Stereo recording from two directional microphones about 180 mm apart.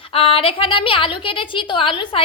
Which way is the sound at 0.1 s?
30° left (ahead or behind).